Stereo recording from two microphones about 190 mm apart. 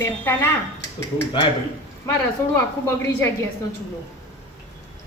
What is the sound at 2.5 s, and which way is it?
Speech, 15° left (ahead or behind).